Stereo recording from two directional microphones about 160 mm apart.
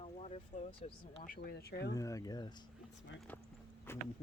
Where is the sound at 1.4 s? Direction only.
80° left.